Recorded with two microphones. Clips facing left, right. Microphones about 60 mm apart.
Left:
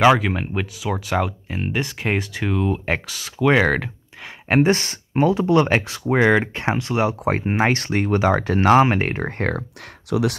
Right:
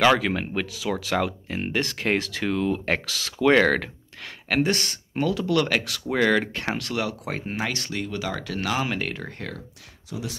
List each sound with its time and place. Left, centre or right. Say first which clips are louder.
0.0 s speech: left 4 dB; centre
4.5 s speech: left 6 dB; left
9.6 s speech: left 9 dB; left